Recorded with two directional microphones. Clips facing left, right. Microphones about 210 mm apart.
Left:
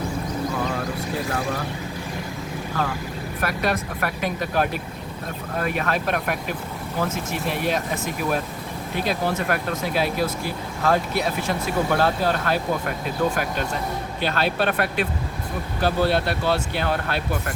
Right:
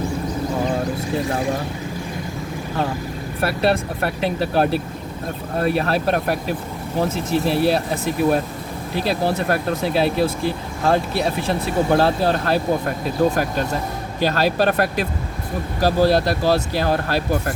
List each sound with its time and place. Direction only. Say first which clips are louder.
3.4 s speech: right 5 dB; 30° right (ahead or behind)
14.2 s speech: right 5 dB; 40° right (ahead or behind)